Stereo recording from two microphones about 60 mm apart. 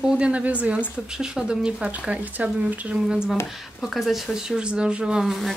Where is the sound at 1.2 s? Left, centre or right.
Centre.